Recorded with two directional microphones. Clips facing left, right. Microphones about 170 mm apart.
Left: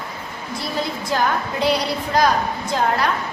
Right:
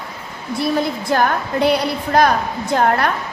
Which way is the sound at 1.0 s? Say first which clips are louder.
Right 3 dB; 55° right (ahead or behind).